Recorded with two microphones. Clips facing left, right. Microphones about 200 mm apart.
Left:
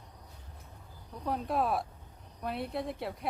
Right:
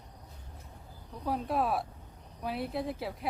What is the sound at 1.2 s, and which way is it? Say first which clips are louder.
A woman's voice: even; centre (ahead or behind).